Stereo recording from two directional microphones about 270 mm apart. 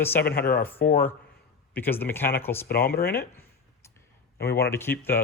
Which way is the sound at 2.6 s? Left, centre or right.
Left.